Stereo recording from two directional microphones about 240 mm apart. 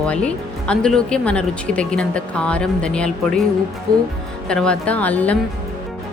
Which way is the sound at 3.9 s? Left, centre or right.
Centre.